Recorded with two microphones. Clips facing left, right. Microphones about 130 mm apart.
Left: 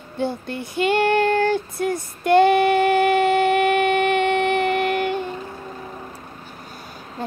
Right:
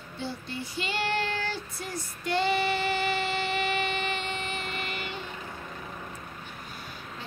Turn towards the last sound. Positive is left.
turn(degrees=40)  # may be behind; listen again after turning